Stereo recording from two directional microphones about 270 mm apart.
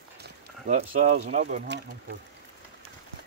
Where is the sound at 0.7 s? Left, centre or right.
Right.